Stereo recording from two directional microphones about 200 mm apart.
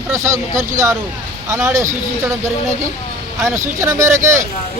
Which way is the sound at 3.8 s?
15° right (ahead or behind).